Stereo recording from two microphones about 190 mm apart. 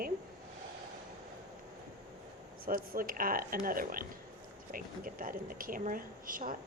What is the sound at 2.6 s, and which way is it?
A woman's voice, 50° right (ahead or behind).